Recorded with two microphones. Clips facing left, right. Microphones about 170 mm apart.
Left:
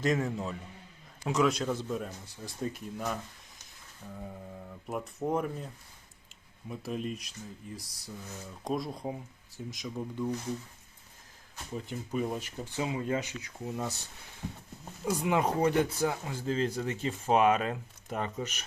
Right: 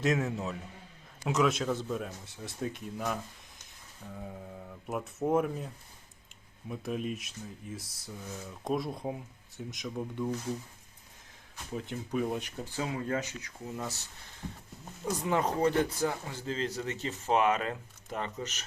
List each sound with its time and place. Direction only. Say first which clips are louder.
0.0 s speech: even; centre (ahead or behind)
11.9 s speech: right 1 dB; centre (ahead or behind)
12.7 s speech: left 1 dB; 15° left (ahead or behind)
15.0 s speech: left 2 dB; 10° left (ahead or behind)